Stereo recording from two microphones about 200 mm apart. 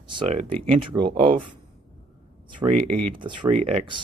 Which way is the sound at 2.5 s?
40° right (ahead or behind).